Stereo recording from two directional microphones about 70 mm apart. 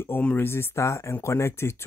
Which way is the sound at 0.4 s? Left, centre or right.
Left.